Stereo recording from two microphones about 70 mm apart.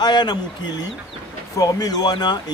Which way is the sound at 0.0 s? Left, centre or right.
Left.